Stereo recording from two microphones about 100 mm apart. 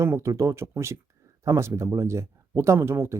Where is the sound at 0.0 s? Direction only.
30° right (ahead or behind).